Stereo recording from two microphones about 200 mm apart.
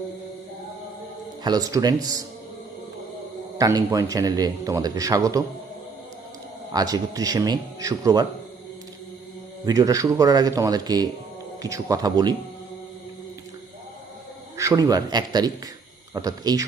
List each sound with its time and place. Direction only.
1.5 s a man's voice: 20° right (ahead or behind)
3.6 s a man's voice: 15° right (ahead or behind)
6.7 s a man's voice: 20° right (ahead or behind)
9.6 s a man's voice: 15° right (ahead or behind)
14.6 s a man's voice: 15° right (ahead or behind)